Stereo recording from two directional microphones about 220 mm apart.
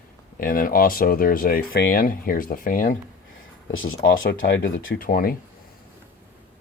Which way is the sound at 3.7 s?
65° left (ahead or behind).